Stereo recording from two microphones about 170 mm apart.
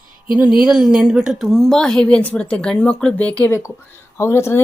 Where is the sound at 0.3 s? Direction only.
5° right (ahead or behind).